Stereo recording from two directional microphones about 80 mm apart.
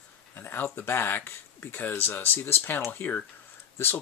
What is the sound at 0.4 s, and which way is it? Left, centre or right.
Speech, left.